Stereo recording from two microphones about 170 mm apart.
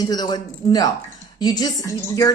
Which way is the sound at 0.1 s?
25° left (ahead or behind).